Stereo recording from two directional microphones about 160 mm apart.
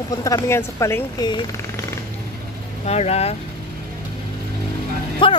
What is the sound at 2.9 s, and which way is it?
Speech, 40° left (ahead or behind).